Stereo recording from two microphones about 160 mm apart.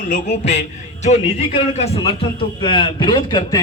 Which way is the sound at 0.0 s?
50° left (ahead or behind).